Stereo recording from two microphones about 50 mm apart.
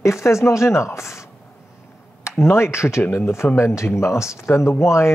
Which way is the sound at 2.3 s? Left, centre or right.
Left.